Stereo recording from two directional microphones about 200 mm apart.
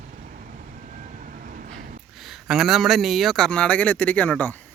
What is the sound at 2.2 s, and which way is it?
A man's voice, centre (ahead or behind).